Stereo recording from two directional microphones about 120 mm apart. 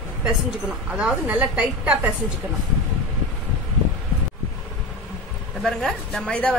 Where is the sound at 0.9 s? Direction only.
10° right (ahead or behind).